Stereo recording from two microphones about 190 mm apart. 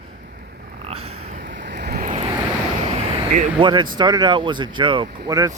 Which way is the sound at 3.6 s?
25° right (ahead or behind).